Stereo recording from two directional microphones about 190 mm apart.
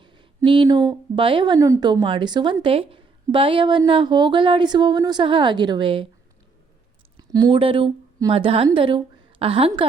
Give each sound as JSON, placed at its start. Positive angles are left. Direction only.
{"t": 0.0, "sound": "speech", "side_deg": -25}
{"t": 7.2, "sound": "a woman's voice", "side_deg": -20}